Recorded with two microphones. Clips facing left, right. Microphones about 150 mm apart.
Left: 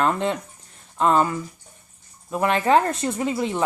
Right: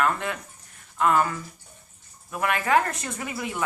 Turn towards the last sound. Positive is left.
turn(degrees=25)  # may be behind; listen again after turning